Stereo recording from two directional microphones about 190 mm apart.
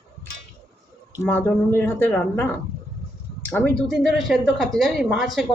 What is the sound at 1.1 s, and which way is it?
Speech, 10° left (ahead or behind).